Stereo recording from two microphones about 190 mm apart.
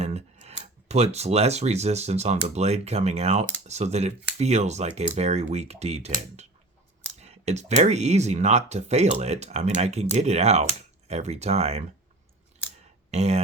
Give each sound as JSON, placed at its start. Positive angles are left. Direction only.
{"t": 0.0, "sound": "speech", "side_deg": -35}
{"t": 13.1, "sound": "speech", "side_deg": -35}